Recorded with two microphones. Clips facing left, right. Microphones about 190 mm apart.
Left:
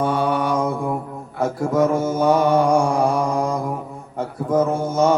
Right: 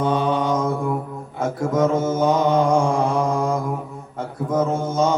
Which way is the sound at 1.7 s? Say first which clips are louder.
Even; 20° right (ahead or behind).